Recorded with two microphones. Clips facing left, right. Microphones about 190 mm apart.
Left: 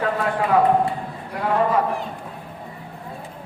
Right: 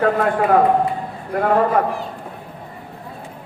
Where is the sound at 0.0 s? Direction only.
50° right (ahead or behind).